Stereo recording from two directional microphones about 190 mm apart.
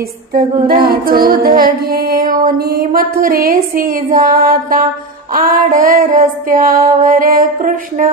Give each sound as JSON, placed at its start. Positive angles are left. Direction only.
{"t": 0.3, "sound": "female singing", "side_deg": -50}